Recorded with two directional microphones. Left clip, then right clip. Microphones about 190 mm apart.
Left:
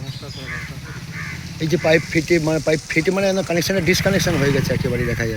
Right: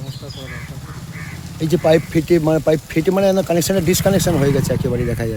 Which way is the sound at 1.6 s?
15° right (ahead or behind).